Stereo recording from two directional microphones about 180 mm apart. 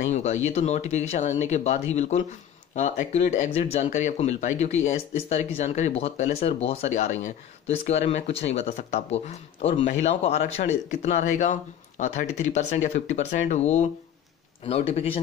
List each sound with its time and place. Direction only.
0.0 s speech: 40° left (ahead or behind)